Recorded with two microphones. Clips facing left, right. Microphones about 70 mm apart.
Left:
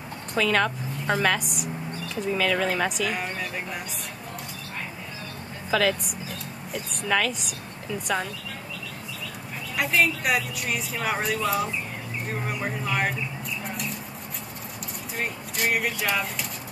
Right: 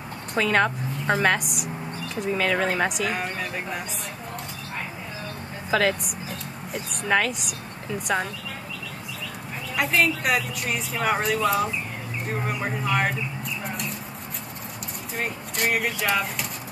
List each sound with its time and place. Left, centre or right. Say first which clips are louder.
0.4 s a woman's voice: right 2 dB; centre
3.1 s speech: right 1 dB; centre
5.7 s speech: right 1 dB; right
7.1 s a woman's voice: right 2 dB; centre
9.8 s speech: right 1 dB; centre
15.1 s speech: right 1 dB; centre